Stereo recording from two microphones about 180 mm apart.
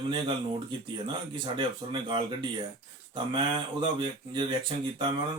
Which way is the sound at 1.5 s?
25° right (ahead or behind).